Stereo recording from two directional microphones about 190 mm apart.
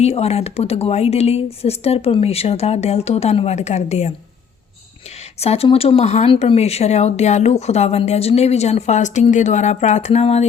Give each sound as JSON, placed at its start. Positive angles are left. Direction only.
{"t": 0.0, "sound": "speech", "side_deg": 35}
{"t": 5.4, "sound": "speech", "side_deg": 30}